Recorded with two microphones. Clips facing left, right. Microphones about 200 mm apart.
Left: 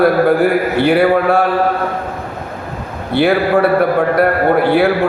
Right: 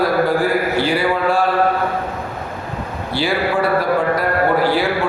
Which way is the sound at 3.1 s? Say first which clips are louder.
Left 7 dB; 60° left (ahead or behind).